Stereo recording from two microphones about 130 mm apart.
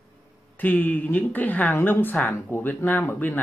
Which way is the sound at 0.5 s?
15° left (ahead or behind).